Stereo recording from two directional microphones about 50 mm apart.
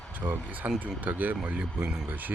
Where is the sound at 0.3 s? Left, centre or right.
Right.